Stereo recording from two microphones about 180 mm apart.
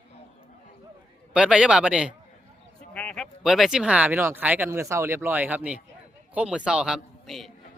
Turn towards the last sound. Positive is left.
turn(degrees=0)  # may be behind; listen again after turning